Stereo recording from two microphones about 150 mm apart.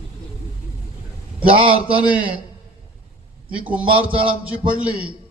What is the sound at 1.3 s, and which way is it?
Speech, 35° right (ahead or behind).